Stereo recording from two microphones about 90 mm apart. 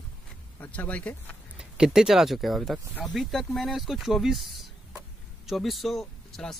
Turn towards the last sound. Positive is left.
turn(degrees=5)  # may be behind; listen again after turning